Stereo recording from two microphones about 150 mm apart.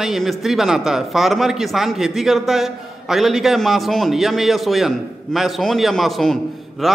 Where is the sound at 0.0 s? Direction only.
Centre (ahead or behind).